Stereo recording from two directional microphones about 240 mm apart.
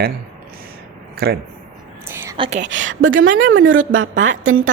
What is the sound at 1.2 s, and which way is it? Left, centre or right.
Speech, right.